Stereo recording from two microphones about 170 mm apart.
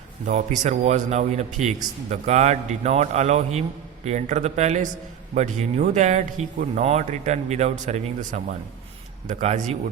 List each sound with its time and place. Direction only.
0.3 s a man's voice: 45° right (ahead or behind)